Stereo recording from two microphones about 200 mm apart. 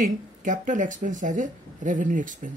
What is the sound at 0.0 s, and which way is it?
Speech, 40° right (ahead or behind).